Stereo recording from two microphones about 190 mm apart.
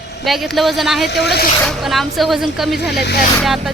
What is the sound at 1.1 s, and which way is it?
Speech, 60° left (ahead or behind).